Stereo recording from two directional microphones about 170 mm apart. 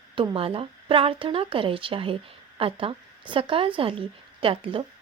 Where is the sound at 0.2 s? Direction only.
30° right (ahead or behind).